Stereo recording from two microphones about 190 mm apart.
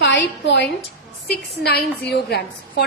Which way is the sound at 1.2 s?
55° left (ahead or behind).